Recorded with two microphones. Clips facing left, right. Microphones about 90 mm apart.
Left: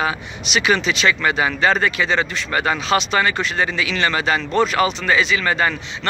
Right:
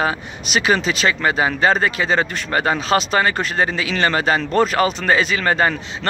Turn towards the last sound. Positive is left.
turn(degrees=-40)  # may be behind; listen again after turning